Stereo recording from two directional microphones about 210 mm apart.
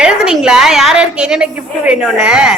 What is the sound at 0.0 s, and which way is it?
A woman's voice, 5° right (ahead or behind).